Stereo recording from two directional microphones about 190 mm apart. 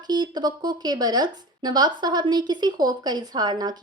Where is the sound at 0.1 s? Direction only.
20° right (ahead or behind).